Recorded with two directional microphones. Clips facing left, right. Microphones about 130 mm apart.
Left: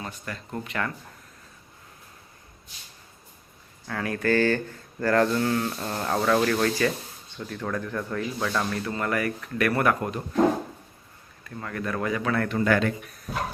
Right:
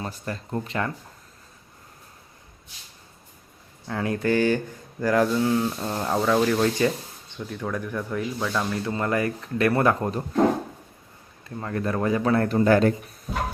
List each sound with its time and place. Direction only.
0.0 s speech: 35° right (ahead or behind)
3.8 s speech: 20° right (ahead or behind); by 8.6 s 5° right (ahead or behind)
8.7 s speech: 20° right (ahead or behind)
11.4 s speech: 25° right (ahead or behind)